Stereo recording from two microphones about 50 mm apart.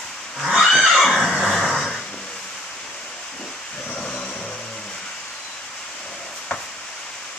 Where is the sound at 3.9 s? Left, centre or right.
Centre.